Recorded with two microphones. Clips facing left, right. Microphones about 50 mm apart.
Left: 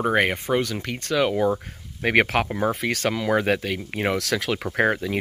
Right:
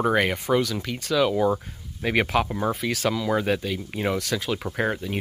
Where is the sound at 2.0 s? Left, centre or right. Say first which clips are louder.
Left 2 dB; left.